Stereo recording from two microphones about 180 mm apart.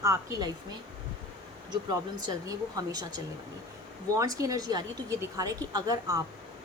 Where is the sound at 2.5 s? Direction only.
20° right (ahead or behind).